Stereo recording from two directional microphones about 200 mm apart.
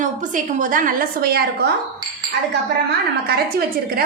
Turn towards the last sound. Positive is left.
turn(degrees=-50)  # may be behind; listen again after turning